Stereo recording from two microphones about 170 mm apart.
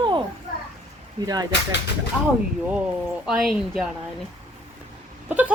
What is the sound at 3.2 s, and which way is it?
Speech, centre (ahead or behind).